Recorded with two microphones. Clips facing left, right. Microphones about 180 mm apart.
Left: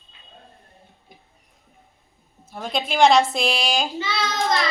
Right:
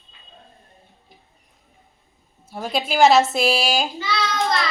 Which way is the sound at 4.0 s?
25° left (ahead or behind).